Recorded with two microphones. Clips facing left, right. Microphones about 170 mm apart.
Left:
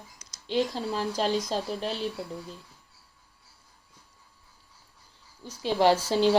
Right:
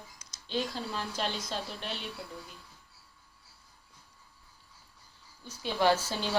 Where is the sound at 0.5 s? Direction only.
35° left (ahead or behind).